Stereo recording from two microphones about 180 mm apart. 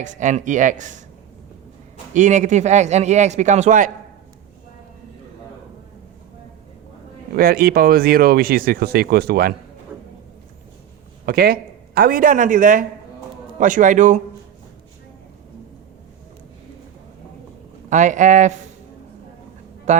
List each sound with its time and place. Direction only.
0.0 s speech: 45° right (ahead or behind)
2.1 s a man's voice: 45° right (ahead or behind)
7.3 s speech: 55° right (ahead or behind)
11.3 s speech: 55° right (ahead or behind)
17.8 s speech: 45° right (ahead or behind)
19.9 s speech: 40° right (ahead or behind)